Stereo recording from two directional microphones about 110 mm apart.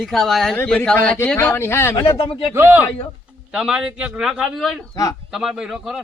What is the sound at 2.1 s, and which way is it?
Speech, 60° left (ahead or behind).